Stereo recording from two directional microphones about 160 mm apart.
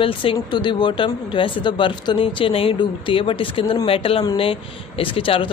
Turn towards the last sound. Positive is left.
turn(degrees=35)  # may be behind; listen again after turning